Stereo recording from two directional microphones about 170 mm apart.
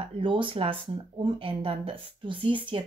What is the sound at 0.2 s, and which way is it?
Speech, 30° right (ahead or behind).